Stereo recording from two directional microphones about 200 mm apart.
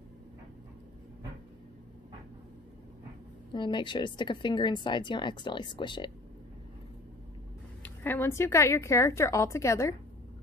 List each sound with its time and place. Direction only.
3.5 s a woman's voice: 25° left (ahead or behind)
7.8 s a woman's voice: 10° left (ahead or behind)